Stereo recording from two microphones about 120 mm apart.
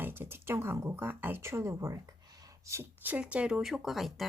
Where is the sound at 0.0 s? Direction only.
20° right (ahead or behind).